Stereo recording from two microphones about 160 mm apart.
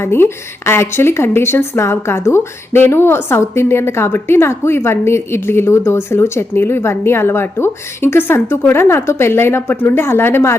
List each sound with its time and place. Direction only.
0.0 s speech: 15° left (ahead or behind)